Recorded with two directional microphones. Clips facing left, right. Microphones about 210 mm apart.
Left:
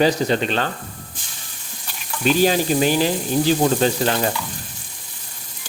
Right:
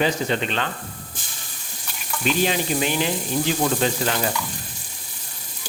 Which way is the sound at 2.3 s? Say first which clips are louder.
Left 5 dB; 40° left (ahead or behind).